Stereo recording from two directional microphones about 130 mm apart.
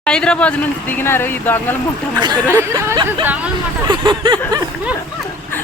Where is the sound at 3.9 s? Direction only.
35° right (ahead or behind).